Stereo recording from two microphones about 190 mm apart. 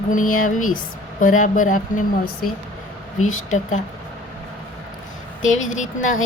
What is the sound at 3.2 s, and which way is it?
Speech, 90° left.